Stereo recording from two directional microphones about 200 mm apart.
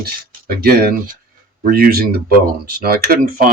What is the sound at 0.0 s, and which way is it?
Speech, 50° right (ahead or behind).